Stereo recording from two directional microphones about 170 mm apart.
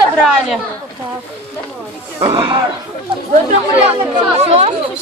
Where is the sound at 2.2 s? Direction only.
30° right (ahead or behind).